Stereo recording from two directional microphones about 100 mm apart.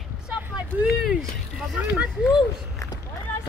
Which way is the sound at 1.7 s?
15° right (ahead or behind).